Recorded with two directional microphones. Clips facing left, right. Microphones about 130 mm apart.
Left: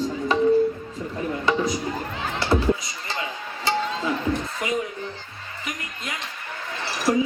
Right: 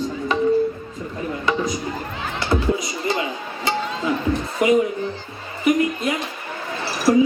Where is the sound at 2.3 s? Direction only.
30° left (ahead or behind).